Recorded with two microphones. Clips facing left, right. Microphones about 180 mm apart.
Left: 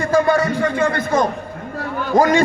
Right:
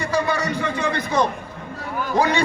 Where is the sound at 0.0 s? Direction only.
50° left (ahead or behind).